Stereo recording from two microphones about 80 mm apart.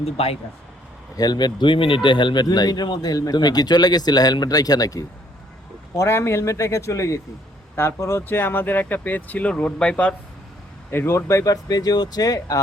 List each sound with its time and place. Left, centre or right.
1.1 s speech: left
5.9 s a man's voice: left; by 10.2 s centre
10.9 s speech: left